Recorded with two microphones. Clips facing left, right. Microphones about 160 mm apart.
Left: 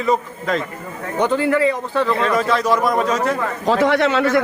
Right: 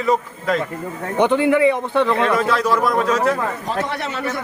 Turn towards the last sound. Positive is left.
turn(degrees=90)